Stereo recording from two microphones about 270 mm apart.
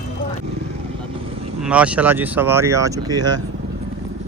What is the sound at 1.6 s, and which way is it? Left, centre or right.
Speech, centre.